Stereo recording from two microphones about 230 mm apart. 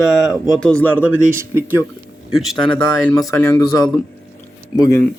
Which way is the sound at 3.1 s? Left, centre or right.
Centre.